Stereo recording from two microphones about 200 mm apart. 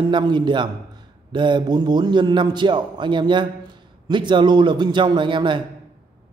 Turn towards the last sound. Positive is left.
turn(degrees=-25)  # may be behind; listen again after turning